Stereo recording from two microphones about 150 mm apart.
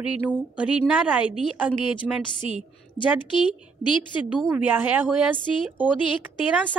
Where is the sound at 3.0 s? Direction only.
35° left (ahead or behind).